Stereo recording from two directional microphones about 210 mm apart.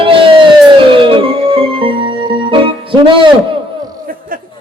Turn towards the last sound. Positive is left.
turn(degrees=-25)  # may be behind; listen again after turning